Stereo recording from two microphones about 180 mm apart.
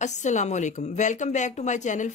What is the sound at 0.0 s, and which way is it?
A woman's voice, 40° left (ahead or behind).